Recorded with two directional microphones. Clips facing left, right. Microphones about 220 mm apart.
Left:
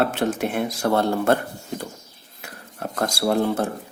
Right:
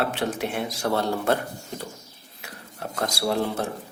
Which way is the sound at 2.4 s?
50° left (ahead or behind).